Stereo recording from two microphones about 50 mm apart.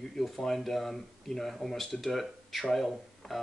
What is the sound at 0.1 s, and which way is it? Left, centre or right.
Speech, centre.